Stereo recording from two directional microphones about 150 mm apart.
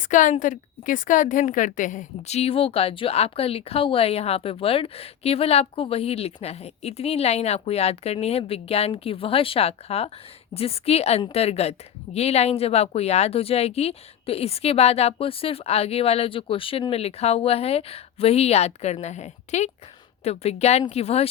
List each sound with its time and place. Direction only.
0.0 s a woman's voice: 60° left (ahead or behind)